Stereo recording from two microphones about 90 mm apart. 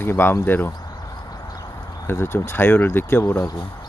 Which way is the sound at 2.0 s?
25° left (ahead or behind).